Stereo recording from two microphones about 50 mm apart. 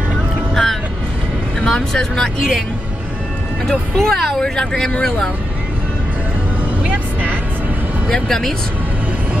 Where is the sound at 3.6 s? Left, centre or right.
Centre.